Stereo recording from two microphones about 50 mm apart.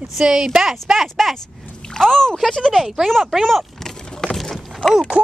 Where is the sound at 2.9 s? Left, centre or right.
Centre.